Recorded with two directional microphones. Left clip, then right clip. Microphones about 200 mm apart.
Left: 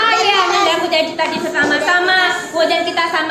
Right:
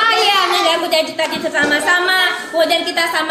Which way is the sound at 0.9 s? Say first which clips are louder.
Even; 40° right (ahead or behind).